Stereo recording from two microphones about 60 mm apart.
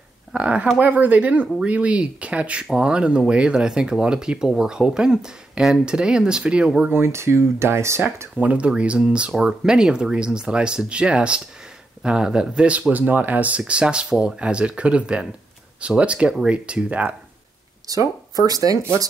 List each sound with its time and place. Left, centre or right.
0.3 s speech: centre
0.7 s speech: right; by 6.9 s centre
6.9 s speech: right
8.4 s speech: right
17.8 s speech: right